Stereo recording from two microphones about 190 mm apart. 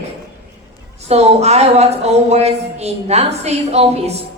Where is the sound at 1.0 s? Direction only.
35° right (ahead or behind).